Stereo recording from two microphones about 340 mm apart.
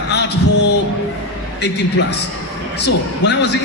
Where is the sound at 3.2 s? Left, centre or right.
Left.